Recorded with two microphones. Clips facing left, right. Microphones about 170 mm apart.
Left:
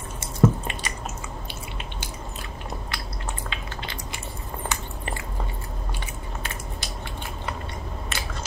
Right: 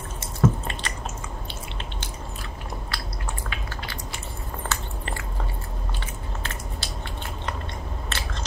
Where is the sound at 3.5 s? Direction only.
25° left (ahead or behind).